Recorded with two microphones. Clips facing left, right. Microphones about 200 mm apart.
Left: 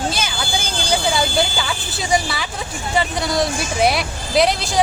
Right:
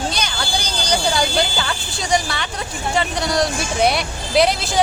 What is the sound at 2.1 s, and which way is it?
Speech, 5° left (ahead or behind).